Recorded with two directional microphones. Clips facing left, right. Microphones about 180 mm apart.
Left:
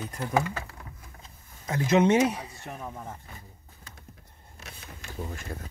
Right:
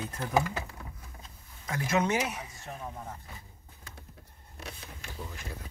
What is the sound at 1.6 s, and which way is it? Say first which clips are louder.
Speech: left 7 dB; 20° left (ahead or behind).